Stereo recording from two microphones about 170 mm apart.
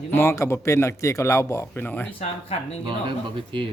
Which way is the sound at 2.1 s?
35° left (ahead or behind).